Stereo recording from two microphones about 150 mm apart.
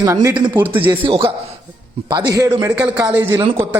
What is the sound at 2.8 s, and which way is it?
Speech, 10° right (ahead or behind).